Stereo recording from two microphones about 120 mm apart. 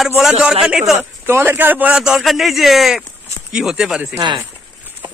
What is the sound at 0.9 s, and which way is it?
A man's voice, 20° right (ahead or behind).